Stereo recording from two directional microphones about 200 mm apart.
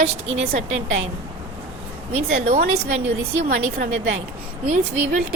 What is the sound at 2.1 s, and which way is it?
Speech, 35° right (ahead or behind).